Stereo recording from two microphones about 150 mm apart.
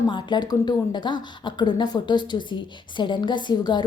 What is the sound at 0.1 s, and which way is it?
A woman's voice, 30° left (ahead or behind).